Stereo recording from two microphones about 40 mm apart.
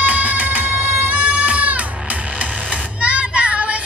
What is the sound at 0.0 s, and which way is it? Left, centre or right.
Music, right.